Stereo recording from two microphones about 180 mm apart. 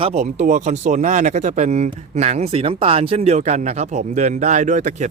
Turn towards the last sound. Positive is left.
turn(degrees=-40)  # may be behind; listen again after turning